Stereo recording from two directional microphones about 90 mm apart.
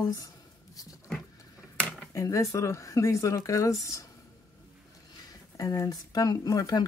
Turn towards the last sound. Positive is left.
turn(degrees=45)  # may be behind; listen again after turning